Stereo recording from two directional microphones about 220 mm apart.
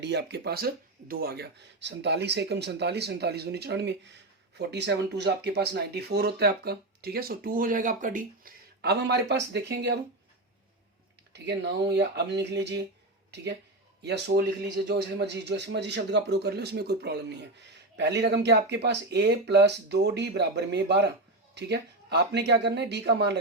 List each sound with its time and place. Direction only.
0.0 s speech: 50° right (ahead or behind)
11.3 s speech: 50° right (ahead or behind)
14.0 s speech: 50° right (ahead or behind)